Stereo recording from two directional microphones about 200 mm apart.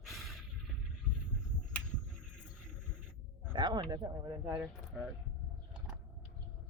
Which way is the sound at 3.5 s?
20° right (ahead or behind).